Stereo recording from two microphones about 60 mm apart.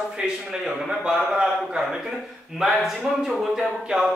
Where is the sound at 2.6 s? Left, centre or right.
Centre.